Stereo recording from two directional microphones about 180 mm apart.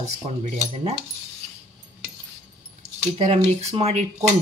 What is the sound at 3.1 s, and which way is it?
Speech, 35° right (ahead or behind).